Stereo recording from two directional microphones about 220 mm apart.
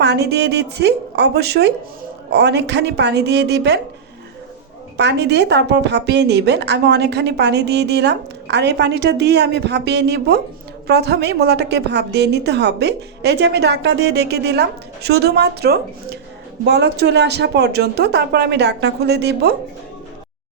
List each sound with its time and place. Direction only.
0.0 s a woman's voice: 50° right (ahead or behind)
4.9 s a woman's voice: 50° right (ahead or behind)